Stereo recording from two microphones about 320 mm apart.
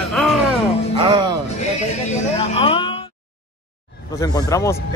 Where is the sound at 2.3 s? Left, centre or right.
Centre.